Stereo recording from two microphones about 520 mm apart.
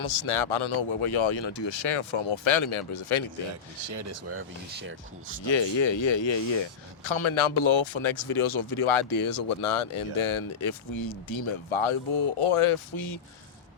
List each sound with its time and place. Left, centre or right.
0.0 s speech: left
3.5 s speech: right
5.5 s speech: left